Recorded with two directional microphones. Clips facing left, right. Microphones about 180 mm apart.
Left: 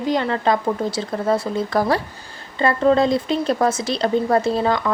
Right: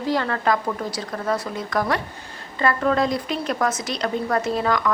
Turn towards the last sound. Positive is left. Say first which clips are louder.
# left 2 dB
turn(degrees=30)  # may be behind; listen again after turning